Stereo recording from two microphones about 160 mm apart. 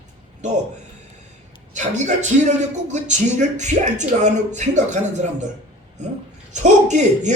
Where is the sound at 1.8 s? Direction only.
50° right (ahead or behind).